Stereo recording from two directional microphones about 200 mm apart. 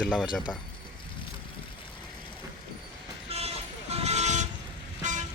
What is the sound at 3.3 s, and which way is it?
Vehicle, 30° right (ahead or behind).